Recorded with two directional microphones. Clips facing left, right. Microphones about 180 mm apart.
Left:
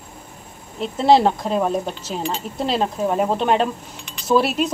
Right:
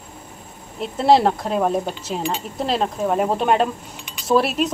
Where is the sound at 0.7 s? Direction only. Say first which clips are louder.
Left 1 dB; centre (ahead or behind).